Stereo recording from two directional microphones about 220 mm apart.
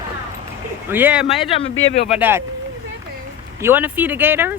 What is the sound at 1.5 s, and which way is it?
Speech, 25° left (ahead or behind).